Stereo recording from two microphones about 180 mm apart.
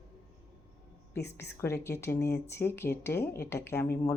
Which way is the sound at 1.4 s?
15° left (ahead or behind).